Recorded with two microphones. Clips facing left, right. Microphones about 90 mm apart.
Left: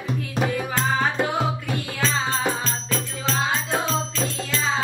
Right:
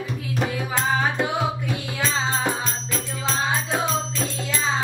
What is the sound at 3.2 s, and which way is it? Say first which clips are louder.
Music: right 1 dB; 15° right (ahead or behind).